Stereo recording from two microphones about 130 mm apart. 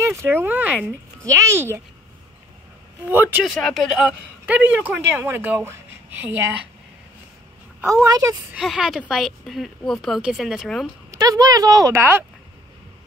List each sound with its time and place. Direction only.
0.0 s speech: 20° right (ahead or behind)
3.1 s speech: 15° right (ahead or behind)
3.4 s speech: centre (ahead or behind)
4.5 s speech: 15° right (ahead or behind)
8.0 s speech: 25° right (ahead or behind)
8.5 s speech: 5° right (ahead or behind)
11.1 s speech: 30° right (ahead or behind)